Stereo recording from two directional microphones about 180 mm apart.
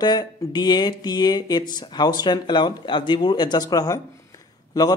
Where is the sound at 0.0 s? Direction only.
25° left (ahead or behind).